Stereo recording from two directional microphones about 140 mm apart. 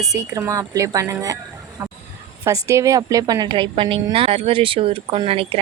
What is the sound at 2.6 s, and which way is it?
A woman's voice, 20° right (ahead or behind).